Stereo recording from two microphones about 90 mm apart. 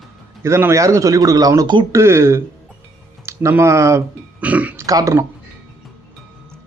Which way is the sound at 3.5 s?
30° right (ahead or behind).